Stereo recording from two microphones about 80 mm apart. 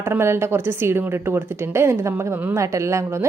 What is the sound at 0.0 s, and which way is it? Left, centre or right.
A woman's voice, right.